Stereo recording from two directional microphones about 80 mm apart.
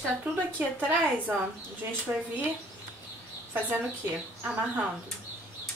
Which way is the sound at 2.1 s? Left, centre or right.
Centre.